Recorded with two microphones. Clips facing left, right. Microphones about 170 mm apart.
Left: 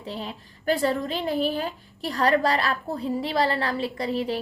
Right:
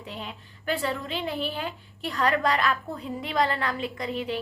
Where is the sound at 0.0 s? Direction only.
35° left (ahead or behind).